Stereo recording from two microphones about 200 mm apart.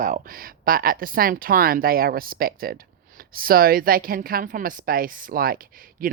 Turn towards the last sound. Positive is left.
turn(degrees=-45)  # may be behind; listen again after turning